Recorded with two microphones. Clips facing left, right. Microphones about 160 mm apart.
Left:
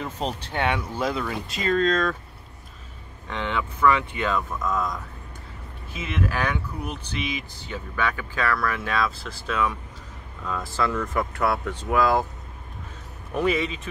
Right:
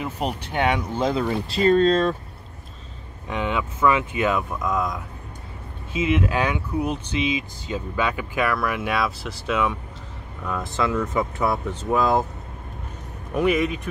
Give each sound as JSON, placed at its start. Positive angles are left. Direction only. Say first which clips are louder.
{"t": 0.0, "sound": "speech", "louder": "right 2 dB", "side_deg": -15}
{"t": 3.3, "sound": "speech", "louder": "right 3 dB", "side_deg": -15}
{"t": 4.6, "sound": "speech", "louder": "right 2 dB", "side_deg": 0}
{"t": 5.9, "sound": "speech", "louder": "right 6 dB", "side_deg": -15}
{"t": 10.6, "sound": "speech", "louder": "right 2 dB", "side_deg": -20}
{"t": 10.9, "sound": "speech", "louder": "right 3 dB", "side_deg": -5}
{"t": 11.4, "sound": "speech", "louder": "right 1 dB", "side_deg": -20}
{"t": 13.3, "sound": "speech", "louder": "right 3 dB", "side_deg": -10}